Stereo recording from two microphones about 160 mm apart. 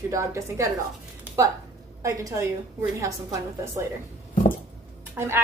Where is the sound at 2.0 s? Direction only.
20° right (ahead or behind).